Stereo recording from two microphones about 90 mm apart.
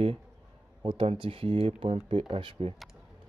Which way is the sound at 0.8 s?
75° right (ahead or behind).